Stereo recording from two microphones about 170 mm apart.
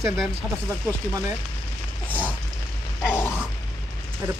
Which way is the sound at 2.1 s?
10° left (ahead or behind).